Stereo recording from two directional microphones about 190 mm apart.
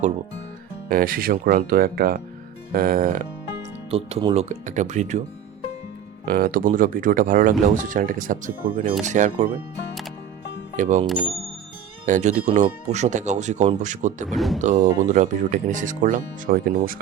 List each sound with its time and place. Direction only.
0.9 s speech: 50° right (ahead or behind)
3.9 s speech: 30° right (ahead or behind)
6.2 s speech: 50° right (ahead or behind)
10.8 s speech: 40° right (ahead or behind)
12.0 s speech: 40° right (ahead or behind)
14.3 s speech: centre (ahead or behind)
14.6 s speech: 40° right (ahead or behind)